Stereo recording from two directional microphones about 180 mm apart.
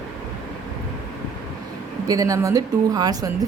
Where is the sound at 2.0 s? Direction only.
20° right (ahead or behind).